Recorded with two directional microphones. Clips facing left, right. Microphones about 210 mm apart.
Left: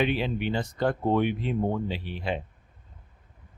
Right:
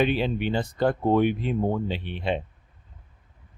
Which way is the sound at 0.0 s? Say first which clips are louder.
Right 3 dB; 30° right (ahead or behind).